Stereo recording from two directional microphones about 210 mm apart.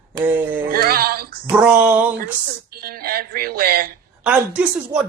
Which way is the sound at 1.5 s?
5° right (ahead or behind).